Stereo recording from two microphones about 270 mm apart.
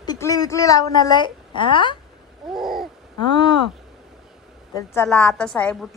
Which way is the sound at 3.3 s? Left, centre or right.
Centre.